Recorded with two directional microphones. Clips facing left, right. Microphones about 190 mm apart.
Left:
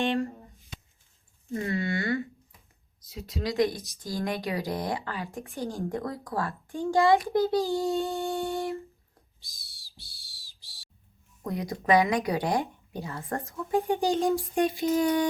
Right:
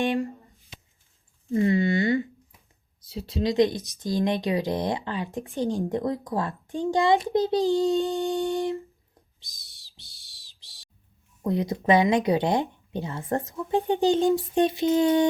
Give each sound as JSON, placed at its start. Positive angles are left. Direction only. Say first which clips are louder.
{"t": 0.0, "sound": "speech", "louder": "right 2 dB", "side_deg": -15}
{"t": 1.6, "sound": "speech", "louder": "right 7 dB", "side_deg": -20}
{"t": 3.1, "sound": "speech", "louder": "right 6 dB", "side_deg": -30}
{"t": 9.6, "sound": "music", "louder": "left 4 dB", "side_deg": -20}
{"t": 11.4, "sound": "speech", "louder": "right 4 dB", "side_deg": -25}